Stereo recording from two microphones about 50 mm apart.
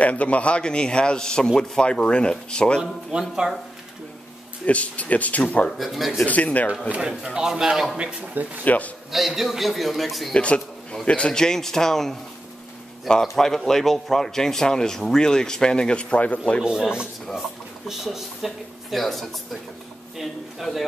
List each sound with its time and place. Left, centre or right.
0.0 s a man's voice: left
2.8 s a man's voice: centre
4.6 s a man's voice: left
5.7 s speech: centre
6.2 s speech: left
7.0 s a man's voice: centre
8.6 s speech: left
9.1 s speech: centre
10.3 s a man's voice: left
17.8 s speech: centre